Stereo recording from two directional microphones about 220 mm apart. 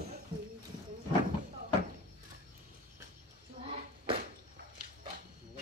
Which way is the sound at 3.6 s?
25° right (ahead or behind).